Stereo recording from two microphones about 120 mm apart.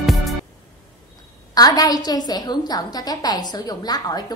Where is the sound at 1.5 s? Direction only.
35° left (ahead or behind).